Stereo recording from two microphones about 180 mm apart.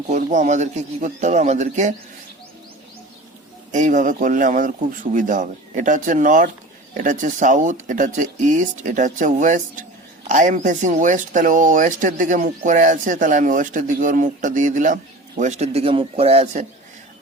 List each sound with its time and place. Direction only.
0.1 s speech: 45° right (ahead or behind)
3.7 s speech: 45° right (ahead or behind)